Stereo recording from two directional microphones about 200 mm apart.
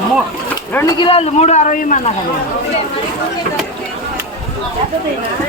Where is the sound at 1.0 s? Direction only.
30° left (ahead or behind).